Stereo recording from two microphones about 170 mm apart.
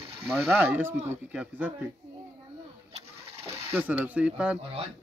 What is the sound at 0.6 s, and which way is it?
Speech, 10° right (ahead or behind).